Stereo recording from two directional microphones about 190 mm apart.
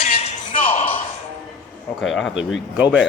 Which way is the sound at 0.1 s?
35° left (ahead or behind).